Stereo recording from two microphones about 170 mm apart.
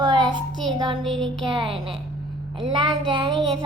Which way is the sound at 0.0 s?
25° right (ahead or behind).